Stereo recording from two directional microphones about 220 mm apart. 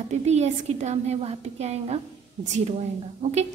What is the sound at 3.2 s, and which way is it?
Speech, 30° right (ahead or behind).